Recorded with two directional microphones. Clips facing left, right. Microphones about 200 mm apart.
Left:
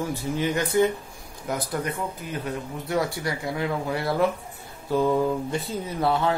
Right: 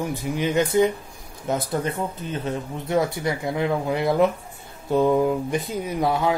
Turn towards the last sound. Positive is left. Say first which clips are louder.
# right 2 dB
turn(degrees=-15)  # may be behind; listen again after turning